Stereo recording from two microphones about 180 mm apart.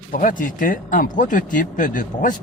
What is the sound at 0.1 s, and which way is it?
Speech, 45° left (ahead or behind).